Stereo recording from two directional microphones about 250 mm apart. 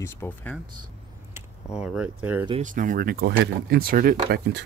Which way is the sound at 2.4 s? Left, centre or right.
Right.